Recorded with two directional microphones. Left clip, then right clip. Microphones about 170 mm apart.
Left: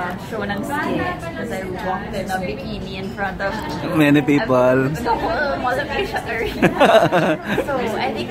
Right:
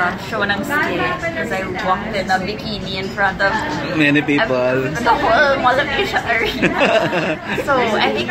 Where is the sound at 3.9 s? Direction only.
30° left (ahead or behind).